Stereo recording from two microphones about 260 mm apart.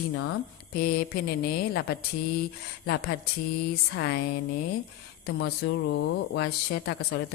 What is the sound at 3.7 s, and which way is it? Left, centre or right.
Speech, left.